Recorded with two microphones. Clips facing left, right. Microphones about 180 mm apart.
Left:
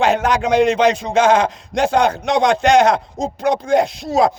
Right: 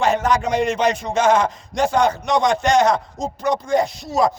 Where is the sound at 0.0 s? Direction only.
65° left (ahead or behind).